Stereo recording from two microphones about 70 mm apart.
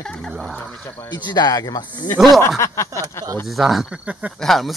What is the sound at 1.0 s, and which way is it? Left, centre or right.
Speech, left.